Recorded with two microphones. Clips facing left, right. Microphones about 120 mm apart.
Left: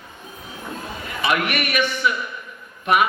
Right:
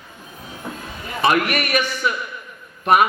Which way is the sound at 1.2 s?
40° right (ahead or behind).